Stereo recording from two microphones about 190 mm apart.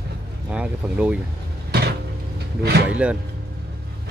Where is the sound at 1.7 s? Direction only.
60° right (ahead or behind).